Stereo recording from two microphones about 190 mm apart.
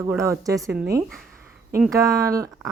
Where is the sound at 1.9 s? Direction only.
15° right (ahead or behind).